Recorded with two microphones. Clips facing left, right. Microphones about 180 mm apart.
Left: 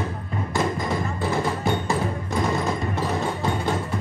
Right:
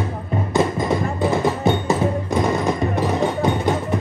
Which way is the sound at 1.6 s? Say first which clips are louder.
Right 5 dB; 20° right (ahead or behind).